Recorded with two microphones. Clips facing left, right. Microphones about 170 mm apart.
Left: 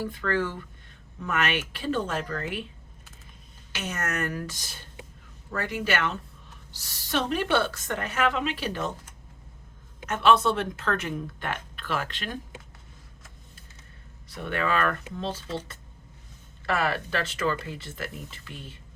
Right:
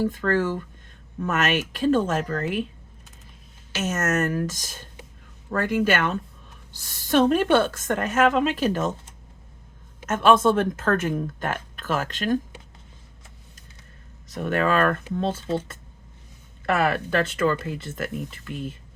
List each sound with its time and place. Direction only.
0.0 s speech: 45° right (ahead or behind)
3.8 s speech: 45° right (ahead or behind)
10.1 s speech: 45° right (ahead or behind)
14.3 s speech: 45° right (ahead or behind)